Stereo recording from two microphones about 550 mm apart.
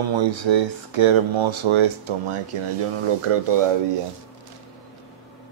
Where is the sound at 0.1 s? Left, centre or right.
Right.